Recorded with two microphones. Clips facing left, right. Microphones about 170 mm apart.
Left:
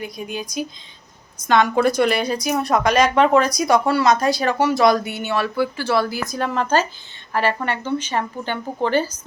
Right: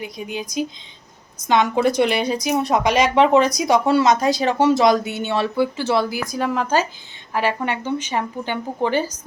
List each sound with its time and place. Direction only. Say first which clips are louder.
0.0 s a woman's voice: even; 20° right (ahead or behind)
1.5 s a woman's voice: left 1 dB; 15° right (ahead or behind)